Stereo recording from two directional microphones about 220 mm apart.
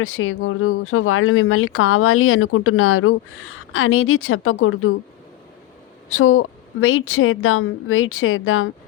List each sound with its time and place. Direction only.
0.0 s speech: 65° left (ahead or behind)
6.1 s speech: 70° left (ahead or behind)